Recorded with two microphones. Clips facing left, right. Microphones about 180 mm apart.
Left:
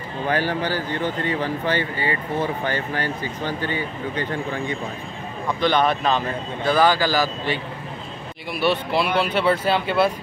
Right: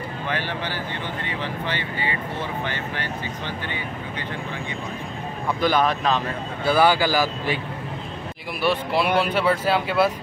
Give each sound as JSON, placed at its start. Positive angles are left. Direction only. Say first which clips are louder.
{"t": 0.3, "sound": "speech", "louder": "left 7 dB", "side_deg": 40}
{"t": 5.6, "sound": "speech", "louder": "left 1 dB", "side_deg": -5}